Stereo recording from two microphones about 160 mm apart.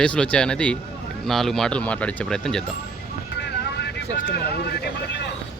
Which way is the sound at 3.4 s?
85° left.